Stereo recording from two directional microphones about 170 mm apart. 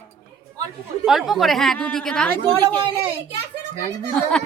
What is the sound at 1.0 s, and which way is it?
A woman's voice, centre (ahead or behind).